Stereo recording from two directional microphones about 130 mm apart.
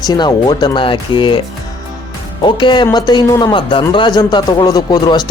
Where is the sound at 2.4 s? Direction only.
35° left (ahead or behind).